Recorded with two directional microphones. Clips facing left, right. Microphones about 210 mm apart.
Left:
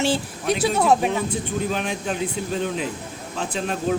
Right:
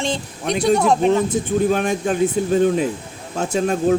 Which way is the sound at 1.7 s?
45° right (ahead or behind).